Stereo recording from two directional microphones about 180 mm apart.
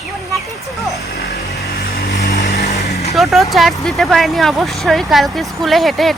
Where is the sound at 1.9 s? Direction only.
65° left (ahead or behind).